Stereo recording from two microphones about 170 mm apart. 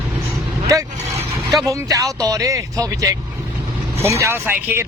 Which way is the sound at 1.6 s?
20° right (ahead or behind).